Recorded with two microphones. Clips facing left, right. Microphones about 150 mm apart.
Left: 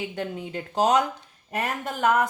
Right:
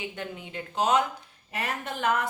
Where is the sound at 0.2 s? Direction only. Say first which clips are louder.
Left 5 dB; 35° left (ahead or behind).